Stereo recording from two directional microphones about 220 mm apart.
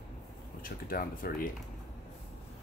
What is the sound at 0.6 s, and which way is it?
Speech, 40° left (ahead or behind).